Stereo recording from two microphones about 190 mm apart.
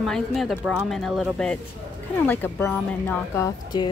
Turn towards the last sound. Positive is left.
turn(degrees=20)  # may be behind; listen again after turning